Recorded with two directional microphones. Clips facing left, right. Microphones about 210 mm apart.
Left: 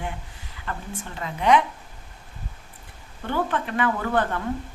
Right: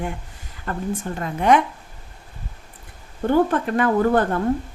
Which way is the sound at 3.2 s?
45° right (ahead or behind).